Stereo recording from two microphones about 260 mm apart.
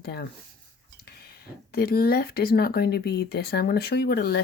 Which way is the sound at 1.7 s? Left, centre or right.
Left.